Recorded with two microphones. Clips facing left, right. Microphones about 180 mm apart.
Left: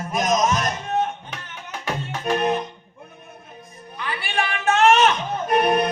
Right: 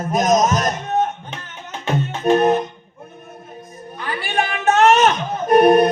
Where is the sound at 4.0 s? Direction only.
45° right (ahead or behind).